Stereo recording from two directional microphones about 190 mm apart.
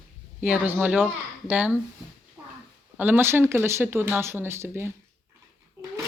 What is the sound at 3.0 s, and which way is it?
A child's voice, 10° right (ahead or behind).